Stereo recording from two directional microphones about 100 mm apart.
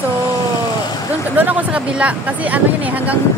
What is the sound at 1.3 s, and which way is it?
Speech, 20° right (ahead or behind).